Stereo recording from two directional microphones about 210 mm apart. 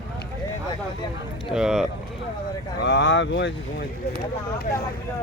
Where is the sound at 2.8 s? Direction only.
60° left (ahead or behind).